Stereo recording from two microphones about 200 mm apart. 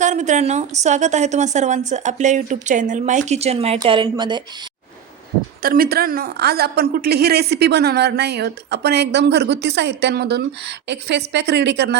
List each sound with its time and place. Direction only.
0.0 s a woman's voice: 35° right (ahead or behind)
5.6 s a woman's voice: 45° right (ahead or behind)